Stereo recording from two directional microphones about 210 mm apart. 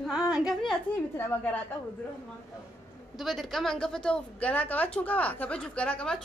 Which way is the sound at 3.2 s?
Centre (ahead or behind).